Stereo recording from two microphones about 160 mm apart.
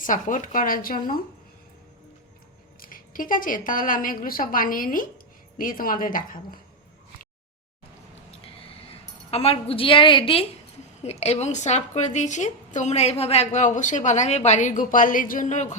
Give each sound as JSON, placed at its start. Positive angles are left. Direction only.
{"t": 0.0, "sound": "a woman's voice", "side_deg": 55}
{"t": 2.8, "sound": "a woman's voice", "side_deg": 60}
{"t": 9.3, "sound": "a woman's voice", "side_deg": 40}